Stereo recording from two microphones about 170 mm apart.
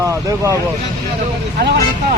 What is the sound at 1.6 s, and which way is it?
Speech, 70° right (ahead or behind).